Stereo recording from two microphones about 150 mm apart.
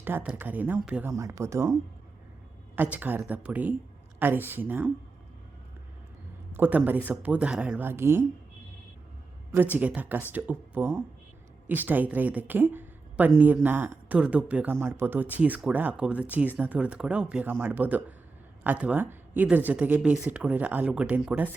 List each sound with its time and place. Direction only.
0.0 s speech: 10° right (ahead or behind)
1.1 s speech: 20° right (ahead or behind)
2.7 s speech: 10° right (ahead or behind)
6.6 s speech: 10° right (ahead or behind)
9.6 s speech: 10° right (ahead or behind)